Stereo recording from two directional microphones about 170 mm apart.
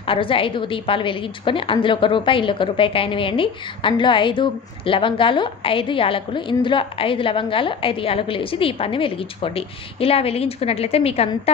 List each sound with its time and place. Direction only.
0.0 s a woman's voice: 30° left (ahead or behind)